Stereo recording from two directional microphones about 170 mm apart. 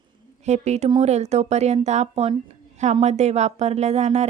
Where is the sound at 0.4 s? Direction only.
40° right (ahead or behind).